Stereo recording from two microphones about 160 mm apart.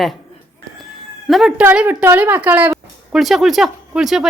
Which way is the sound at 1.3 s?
Centre (ahead or behind).